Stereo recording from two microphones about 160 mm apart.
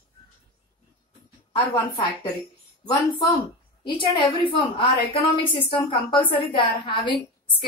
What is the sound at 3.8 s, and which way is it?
A woman's voice, 30° left (ahead or behind).